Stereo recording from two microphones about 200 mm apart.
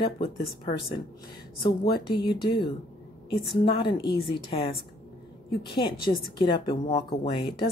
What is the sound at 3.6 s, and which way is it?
A woman's voice, 25° left (ahead or behind).